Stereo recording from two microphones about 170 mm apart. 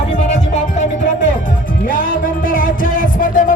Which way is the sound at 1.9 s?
55° left (ahead or behind).